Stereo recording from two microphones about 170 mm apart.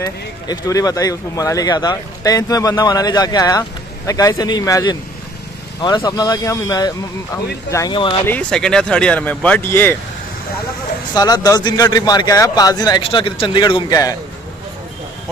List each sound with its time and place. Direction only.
0.0 s speech: 20° left (ahead or behind)
8.3 s speech: 5° left (ahead or behind)
11.1 s speech: 25° left (ahead or behind)